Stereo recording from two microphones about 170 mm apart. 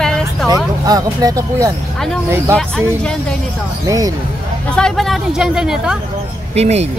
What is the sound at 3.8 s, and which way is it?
Speech, 20° right (ahead or behind).